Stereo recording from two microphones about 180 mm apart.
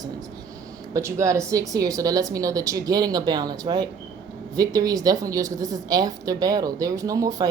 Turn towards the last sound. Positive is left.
turn(degrees=-20)  # may be behind; listen again after turning